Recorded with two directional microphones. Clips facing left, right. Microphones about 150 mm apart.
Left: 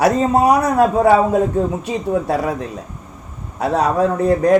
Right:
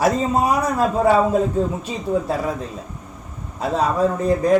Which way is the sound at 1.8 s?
70° left (ahead or behind).